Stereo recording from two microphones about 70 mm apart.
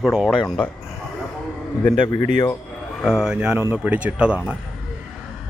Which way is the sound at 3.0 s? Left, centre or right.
Centre.